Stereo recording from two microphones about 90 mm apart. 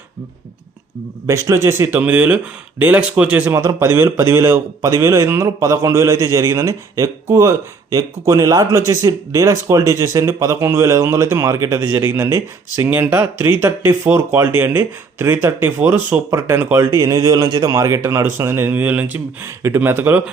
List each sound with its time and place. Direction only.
1.3 s speech: 35° right (ahead or behind)
3.6 s speech: 35° right (ahead or behind)
16.7 s speech: 35° right (ahead or behind); by 20.2 s 20° right (ahead or behind)